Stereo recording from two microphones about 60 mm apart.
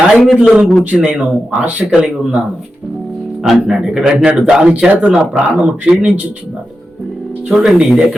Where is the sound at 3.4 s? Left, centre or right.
Centre.